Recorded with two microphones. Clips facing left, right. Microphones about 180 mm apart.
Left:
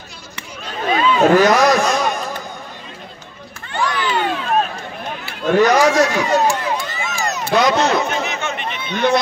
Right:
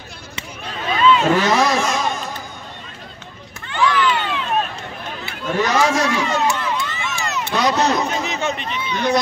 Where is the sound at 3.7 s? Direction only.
45° left (ahead or behind).